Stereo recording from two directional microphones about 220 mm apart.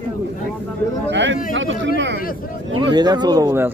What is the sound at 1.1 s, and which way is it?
Speech, 55° right (ahead or behind).